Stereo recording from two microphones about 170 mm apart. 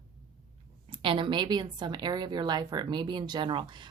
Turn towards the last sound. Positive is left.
turn(degrees=-30)  # may be behind; listen again after turning